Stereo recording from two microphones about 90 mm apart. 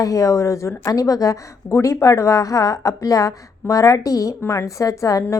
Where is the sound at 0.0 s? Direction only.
40° left (ahead or behind).